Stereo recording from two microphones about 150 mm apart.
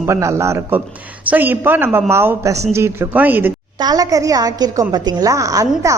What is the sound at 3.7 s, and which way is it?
A woman's voice, 25° right (ahead or behind).